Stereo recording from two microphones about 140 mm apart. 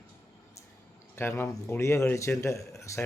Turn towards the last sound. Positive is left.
turn(degrees=20)  # may be behind; listen again after turning